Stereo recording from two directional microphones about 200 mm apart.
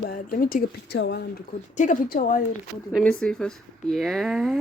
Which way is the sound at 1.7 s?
40° left (ahead or behind).